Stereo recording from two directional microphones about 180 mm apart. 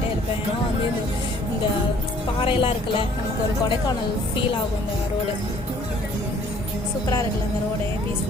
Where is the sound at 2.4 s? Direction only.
30° left (ahead or behind).